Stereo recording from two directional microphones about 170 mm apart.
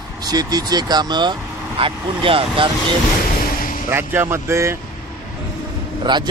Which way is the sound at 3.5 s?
55° left (ahead or behind).